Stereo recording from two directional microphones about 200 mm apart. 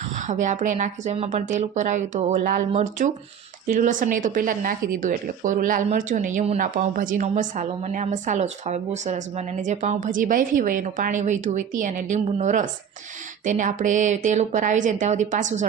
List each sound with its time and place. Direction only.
0.3 s speech: 40° right (ahead or behind)